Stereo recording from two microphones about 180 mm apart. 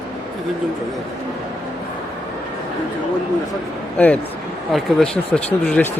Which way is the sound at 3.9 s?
10° left (ahead or behind).